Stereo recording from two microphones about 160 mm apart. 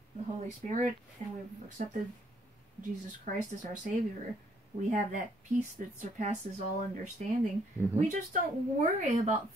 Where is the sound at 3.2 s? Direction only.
50° right (ahead or behind).